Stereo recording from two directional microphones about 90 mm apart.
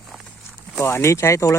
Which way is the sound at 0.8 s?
30° left (ahead or behind).